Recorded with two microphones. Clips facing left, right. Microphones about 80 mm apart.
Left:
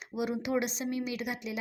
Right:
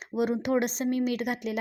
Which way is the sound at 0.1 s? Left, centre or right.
Right.